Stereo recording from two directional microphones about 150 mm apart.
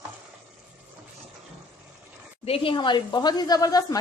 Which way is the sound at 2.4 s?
40° left (ahead or behind).